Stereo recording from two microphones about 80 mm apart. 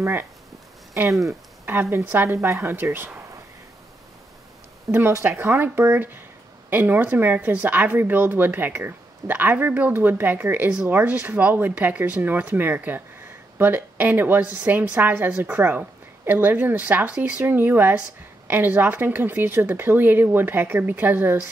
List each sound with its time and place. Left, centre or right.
0.0 s a woman's voice: right
1.7 s a woman's voice: right
4.9 s a woman's voice: right